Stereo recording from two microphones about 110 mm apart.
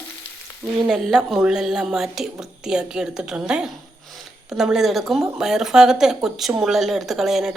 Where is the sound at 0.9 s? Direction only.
5° right (ahead or behind).